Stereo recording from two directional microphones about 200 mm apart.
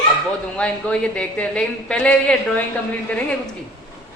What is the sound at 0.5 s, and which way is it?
A man's voice, 5° left (ahead or behind).